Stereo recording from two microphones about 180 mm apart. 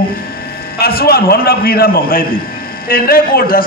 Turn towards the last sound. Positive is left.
turn(degrees=55)  # may be behind; listen again after turning